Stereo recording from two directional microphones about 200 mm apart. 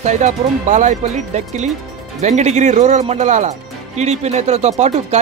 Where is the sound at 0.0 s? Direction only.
35° right (ahead or behind).